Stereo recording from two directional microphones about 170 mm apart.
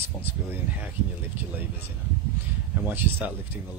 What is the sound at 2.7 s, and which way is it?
Speech, 10° right (ahead or behind).